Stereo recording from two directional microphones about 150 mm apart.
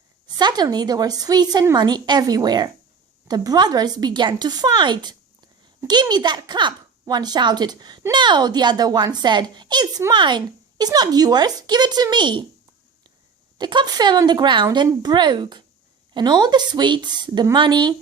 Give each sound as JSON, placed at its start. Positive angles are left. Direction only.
{"t": 0.3, "sound": "a woman's voice", "side_deg": -30}
{"t": 13.6, "sound": "a woman's voice", "side_deg": -30}